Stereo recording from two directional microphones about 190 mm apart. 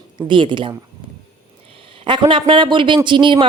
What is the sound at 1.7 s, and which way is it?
A man's voice, 30° right (ahead or behind).